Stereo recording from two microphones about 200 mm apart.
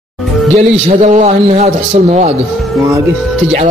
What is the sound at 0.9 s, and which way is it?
Speech, 35° right (ahead or behind).